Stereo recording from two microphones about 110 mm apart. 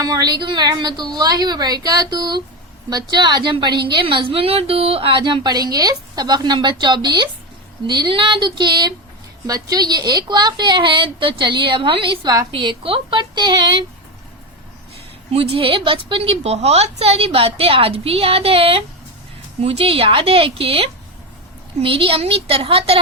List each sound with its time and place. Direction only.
0.0 s a woman's voice: 35° right (ahead or behind)
15.3 s a woman's voice: 60° right (ahead or behind)